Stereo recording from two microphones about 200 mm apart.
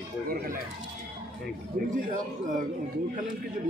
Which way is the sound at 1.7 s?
45° right (ahead or behind).